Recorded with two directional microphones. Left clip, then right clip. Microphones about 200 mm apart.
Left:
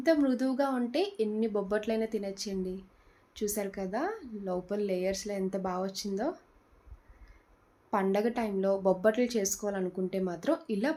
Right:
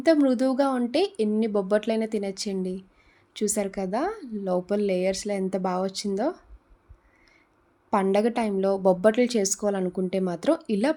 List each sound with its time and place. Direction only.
0.0 s a woman's voice: 45° right (ahead or behind)
7.9 s a woman's voice: 45° right (ahead or behind)